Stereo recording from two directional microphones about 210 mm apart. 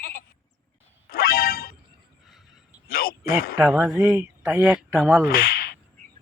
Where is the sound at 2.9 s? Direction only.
45° left (ahead or behind).